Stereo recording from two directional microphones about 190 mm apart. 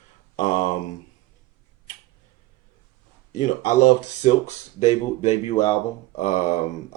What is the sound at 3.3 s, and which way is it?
Speech, 40° left (ahead or behind).